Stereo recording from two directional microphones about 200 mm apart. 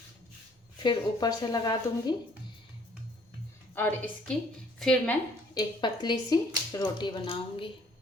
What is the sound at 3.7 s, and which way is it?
A woman's voice, 10° left (ahead or behind).